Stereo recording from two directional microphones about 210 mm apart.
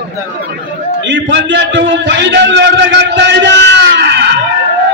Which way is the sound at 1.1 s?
60° right (ahead or behind).